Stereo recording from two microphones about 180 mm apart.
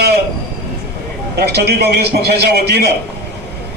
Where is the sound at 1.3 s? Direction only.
65° right (ahead or behind).